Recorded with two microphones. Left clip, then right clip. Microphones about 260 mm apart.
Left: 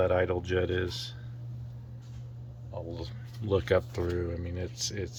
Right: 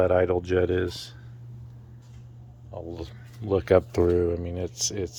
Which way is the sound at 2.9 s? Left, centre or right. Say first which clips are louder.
Right 3 dB; right.